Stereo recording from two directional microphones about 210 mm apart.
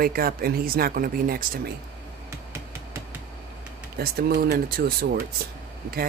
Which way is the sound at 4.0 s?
50° right (ahead or behind).